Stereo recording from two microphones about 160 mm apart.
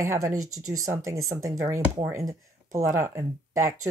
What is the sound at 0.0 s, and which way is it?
Speech, 20° right (ahead or behind).